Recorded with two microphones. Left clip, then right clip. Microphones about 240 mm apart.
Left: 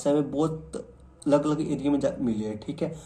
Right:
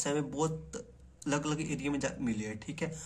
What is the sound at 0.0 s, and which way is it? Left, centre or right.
Speech, right.